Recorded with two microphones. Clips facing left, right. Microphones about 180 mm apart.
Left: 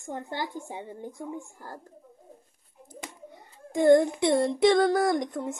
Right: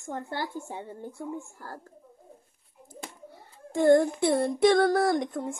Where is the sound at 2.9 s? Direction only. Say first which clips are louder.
Even; 20° left (ahead or behind).